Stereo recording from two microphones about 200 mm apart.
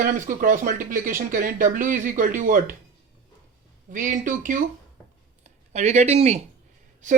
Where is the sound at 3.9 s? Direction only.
40° right (ahead or behind).